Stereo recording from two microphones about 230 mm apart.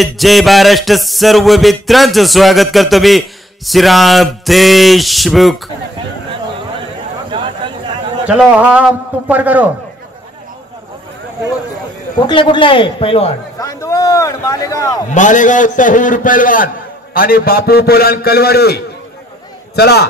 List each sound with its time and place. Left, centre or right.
0.0 s music: centre
7.2 s a sound: right
8.3 s music: centre
12.3 s a man's voice: left
15.1 s a man's voice: left